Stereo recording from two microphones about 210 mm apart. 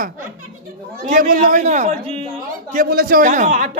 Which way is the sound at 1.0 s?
40° right (ahead or behind).